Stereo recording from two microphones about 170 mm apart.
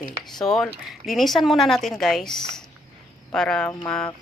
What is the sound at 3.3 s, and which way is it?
Speech, 5° left (ahead or behind).